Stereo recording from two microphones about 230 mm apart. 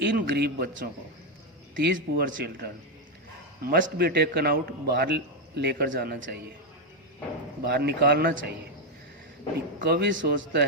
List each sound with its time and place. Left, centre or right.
0.2 s a man's voice: right
7.6 s a man's voice: right
9.8 s a man's voice: right